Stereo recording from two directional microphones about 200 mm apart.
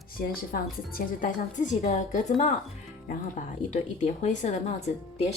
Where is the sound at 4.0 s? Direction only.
35° left (ahead or behind).